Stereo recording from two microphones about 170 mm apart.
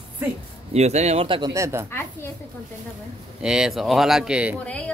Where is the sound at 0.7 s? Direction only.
40° right (ahead or behind).